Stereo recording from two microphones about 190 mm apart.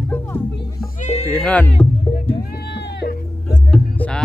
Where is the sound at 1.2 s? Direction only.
10° left (ahead or behind).